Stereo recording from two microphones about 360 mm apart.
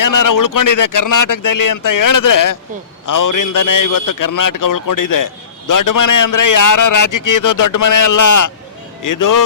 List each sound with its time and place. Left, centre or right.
0.0 s a man's voice: left